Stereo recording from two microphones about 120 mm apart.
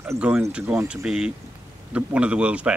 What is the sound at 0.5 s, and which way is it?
Speech, 10° right (ahead or behind).